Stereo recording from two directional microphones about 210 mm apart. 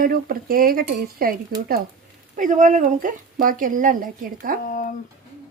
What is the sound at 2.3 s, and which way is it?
Speech, 40° right (ahead or behind).